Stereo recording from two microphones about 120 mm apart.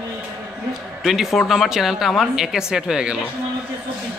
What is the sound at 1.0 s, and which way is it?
Speech, centre (ahead or behind).